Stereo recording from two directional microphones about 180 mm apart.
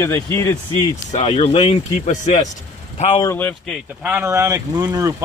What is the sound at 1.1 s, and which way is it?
Speech, 35° left (ahead or behind).